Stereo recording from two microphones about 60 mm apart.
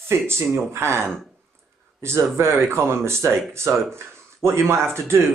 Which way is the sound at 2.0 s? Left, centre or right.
Right.